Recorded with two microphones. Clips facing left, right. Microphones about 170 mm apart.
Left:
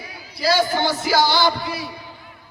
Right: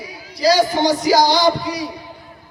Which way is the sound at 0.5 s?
40° right (ahead or behind).